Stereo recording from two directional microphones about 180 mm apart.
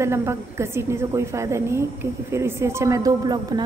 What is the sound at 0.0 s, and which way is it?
A woman's voice, 15° right (ahead or behind).